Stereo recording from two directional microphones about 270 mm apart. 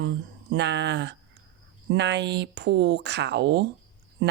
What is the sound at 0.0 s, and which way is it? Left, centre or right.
Speech, right.